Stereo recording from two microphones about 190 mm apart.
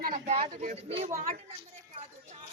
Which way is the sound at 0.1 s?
35° right (ahead or behind).